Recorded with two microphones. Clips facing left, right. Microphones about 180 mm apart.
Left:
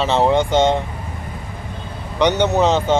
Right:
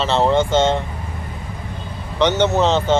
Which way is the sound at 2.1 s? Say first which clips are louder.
Even; 15° left (ahead or behind).